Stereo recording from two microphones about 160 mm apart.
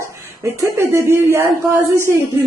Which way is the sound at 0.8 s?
15° right (ahead or behind).